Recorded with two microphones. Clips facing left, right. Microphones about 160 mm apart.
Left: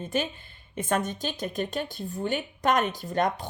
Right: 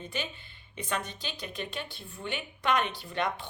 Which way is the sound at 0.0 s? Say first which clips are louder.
Left 8 dB; 45° left (ahead or behind).